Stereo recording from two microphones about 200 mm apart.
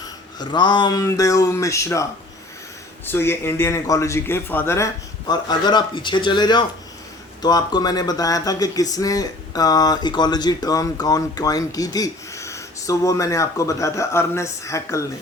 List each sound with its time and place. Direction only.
0.3 s speech: 20° left (ahead or behind)
3.1 s speech: 10° left (ahead or behind)